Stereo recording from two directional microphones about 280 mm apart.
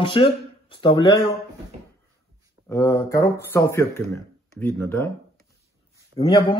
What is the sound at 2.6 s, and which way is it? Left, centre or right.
Speech, centre.